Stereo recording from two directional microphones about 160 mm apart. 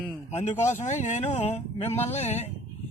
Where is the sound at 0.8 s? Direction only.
50° left (ahead or behind).